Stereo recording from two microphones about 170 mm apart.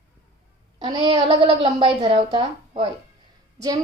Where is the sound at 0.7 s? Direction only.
30° right (ahead or behind).